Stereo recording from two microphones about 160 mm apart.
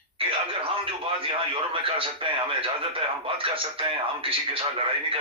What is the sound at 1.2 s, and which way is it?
Speech, 35° right (ahead or behind).